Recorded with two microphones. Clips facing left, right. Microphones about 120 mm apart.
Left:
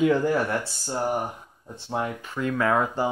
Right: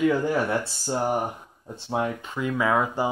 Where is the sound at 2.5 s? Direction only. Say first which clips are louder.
Even; 5° right (ahead or behind).